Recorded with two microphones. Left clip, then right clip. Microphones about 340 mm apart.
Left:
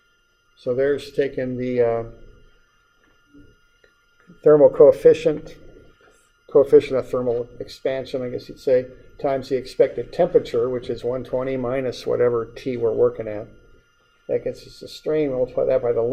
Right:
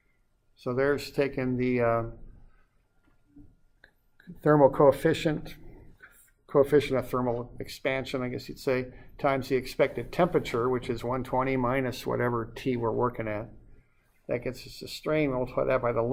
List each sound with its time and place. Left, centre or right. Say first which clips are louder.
0.6 s speech: left 6 dB; right
1.5 s speech: left 4 dB; right
4.4 s speech: left 9 dB; right
6.4 s speech: left 9 dB; right
13.0 s speech: left 9 dB; right